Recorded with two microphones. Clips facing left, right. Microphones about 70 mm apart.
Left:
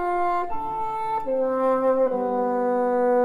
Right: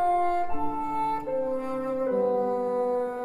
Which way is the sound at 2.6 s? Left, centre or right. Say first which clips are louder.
Left 5 dB; left.